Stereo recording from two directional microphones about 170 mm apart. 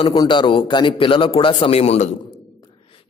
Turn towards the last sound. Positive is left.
turn(degrees=30)  # may be behind; listen again after turning